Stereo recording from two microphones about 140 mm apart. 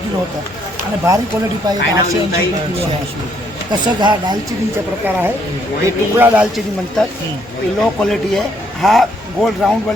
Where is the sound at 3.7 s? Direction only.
30° right (ahead or behind).